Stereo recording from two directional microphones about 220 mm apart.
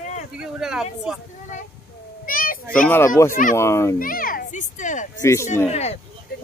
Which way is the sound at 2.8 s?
10° left (ahead or behind).